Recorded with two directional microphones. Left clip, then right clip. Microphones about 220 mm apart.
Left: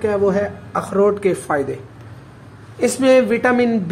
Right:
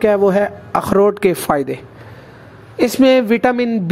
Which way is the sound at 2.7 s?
35° right (ahead or behind).